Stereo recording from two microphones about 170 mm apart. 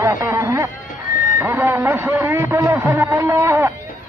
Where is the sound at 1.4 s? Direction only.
15° right (ahead or behind).